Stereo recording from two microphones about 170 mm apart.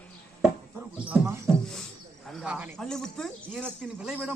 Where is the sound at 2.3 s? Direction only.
10° right (ahead or behind).